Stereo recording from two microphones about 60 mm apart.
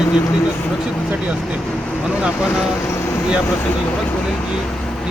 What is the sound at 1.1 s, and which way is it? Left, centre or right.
Speech, right.